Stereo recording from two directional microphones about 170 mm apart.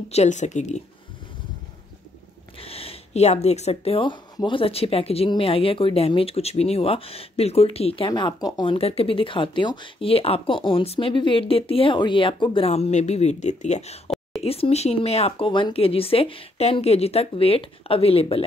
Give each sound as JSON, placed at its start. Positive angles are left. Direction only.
{"t": 0.1, "sound": "speech", "side_deg": 45}
{"t": 2.5, "sound": "speech", "side_deg": 35}